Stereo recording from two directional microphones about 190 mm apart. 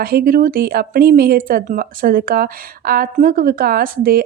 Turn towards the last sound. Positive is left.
turn(degrees=-50)  # may be behind; listen again after turning